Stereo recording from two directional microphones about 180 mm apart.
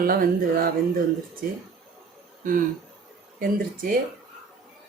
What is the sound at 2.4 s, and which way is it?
Speech, 50° right (ahead or behind).